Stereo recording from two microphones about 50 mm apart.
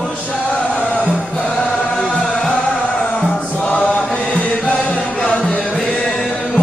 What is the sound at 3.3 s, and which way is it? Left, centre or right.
Chant, left.